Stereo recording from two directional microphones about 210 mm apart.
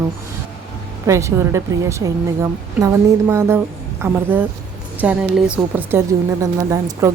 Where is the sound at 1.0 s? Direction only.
15° right (ahead or behind).